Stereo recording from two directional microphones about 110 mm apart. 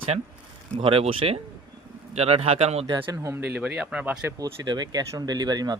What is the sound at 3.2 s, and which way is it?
Speech, 20° right (ahead or behind).